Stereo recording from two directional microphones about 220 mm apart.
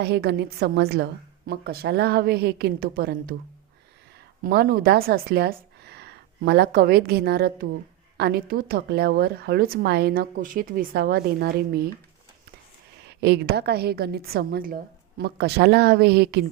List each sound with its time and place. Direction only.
0.0 s a woman's voice: 45° right (ahead or behind)
4.4 s a woman's voice: 45° right (ahead or behind)
13.1 s a woman's voice: 50° right (ahead or behind)